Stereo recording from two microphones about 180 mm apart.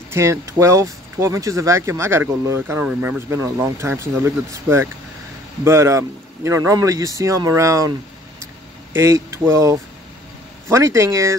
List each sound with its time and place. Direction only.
0.1 s speech: 15° right (ahead or behind)
8.9 s speech: 15° right (ahead or behind)